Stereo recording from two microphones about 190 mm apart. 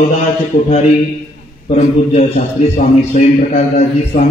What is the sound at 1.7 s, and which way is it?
A man's voice, 35° left (ahead or behind).